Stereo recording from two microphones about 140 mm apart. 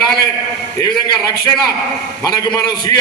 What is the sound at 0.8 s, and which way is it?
Speech, 30° left (ahead or behind).